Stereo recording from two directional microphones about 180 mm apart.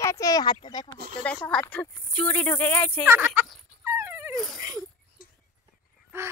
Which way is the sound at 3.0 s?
15° right (ahead or behind).